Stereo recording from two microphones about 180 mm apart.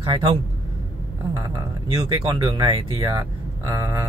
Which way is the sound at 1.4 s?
20° right (ahead or behind).